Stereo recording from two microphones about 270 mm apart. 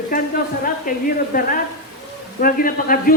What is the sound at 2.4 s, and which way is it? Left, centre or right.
Speech, left.